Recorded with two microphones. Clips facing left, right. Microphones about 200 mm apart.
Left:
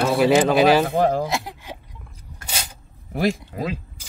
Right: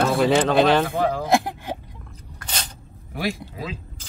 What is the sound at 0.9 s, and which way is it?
Speech, 50° left (ahead or behind).